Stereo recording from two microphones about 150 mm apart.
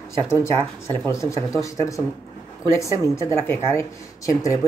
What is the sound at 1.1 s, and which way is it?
Speech, 20° left (ahead or behind).